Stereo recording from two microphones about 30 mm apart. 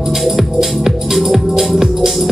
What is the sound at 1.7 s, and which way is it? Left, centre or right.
Music, centre.